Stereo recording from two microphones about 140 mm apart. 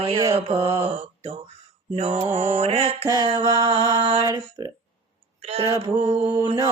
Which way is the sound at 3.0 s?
25° right (ahead or behind).